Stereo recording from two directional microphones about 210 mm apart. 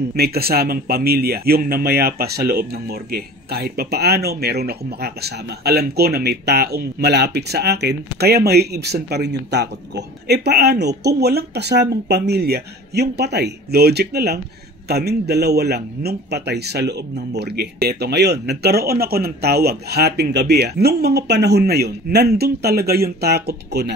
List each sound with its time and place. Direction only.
0.1 s speech: 50° right (ahead or behind)